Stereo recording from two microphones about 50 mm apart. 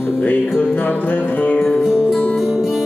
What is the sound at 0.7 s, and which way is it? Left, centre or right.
Music, left.